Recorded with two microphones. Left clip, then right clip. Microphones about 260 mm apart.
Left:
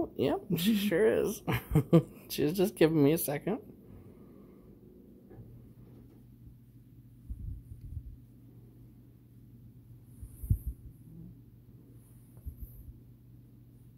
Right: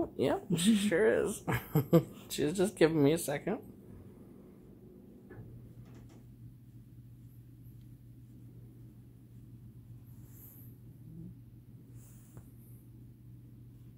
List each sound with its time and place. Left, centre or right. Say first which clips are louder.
0.0 s speech: left 1 dB; left